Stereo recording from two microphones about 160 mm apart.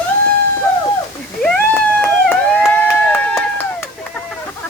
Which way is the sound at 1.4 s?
5° left (ahead or behind).